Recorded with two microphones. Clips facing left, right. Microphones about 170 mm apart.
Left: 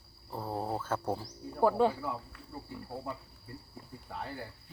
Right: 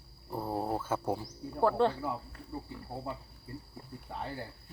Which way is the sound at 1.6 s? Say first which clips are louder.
Left 1 dB; 10° left (ahead or behind).